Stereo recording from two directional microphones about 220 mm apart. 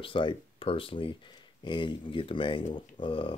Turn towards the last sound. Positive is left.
turn(degrees=25)  # may be behind; listen again after turning